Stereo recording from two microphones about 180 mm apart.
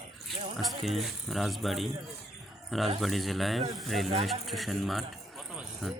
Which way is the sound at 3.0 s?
Centre (ahead or behind).